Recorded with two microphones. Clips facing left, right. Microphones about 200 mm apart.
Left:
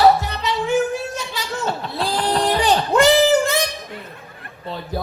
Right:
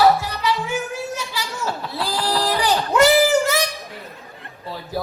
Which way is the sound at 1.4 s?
25° left (ahead or behind).